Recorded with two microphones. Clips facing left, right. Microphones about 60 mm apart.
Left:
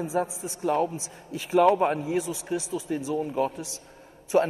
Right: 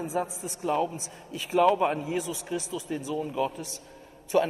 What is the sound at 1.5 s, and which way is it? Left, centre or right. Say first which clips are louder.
Speech: left 2 dB; left.